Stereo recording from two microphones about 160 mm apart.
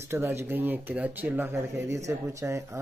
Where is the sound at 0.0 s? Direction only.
15° right (ahead or behind).